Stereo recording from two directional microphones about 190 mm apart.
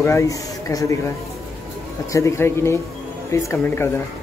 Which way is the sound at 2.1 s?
15° left (ahead or behind).